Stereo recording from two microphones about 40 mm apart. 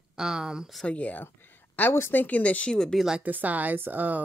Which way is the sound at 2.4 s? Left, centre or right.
Left.